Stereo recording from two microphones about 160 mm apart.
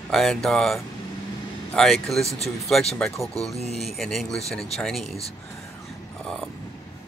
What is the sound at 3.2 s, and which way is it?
Speech, 20° right (ahead or behind).